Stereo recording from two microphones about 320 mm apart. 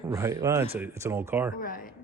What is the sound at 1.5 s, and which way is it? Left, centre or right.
Speech, left.